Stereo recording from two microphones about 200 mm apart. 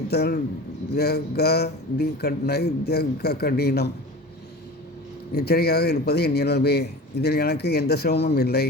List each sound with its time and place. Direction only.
0.1 s a man's voice: 55° left (ahead or behind)
5.3 s speech: 50° left (ahead or behind)